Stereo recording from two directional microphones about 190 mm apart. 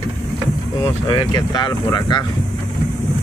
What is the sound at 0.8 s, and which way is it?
Speech, 20° left (ahead or behind).